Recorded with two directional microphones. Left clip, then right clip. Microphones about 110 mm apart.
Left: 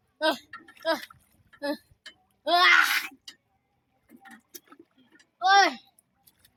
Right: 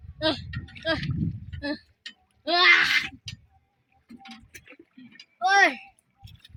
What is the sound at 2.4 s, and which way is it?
Speech, 15° left (ahead or behind).